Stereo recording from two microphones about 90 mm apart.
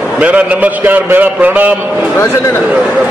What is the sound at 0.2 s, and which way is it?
A man's voice, 15° right (ahead or behind).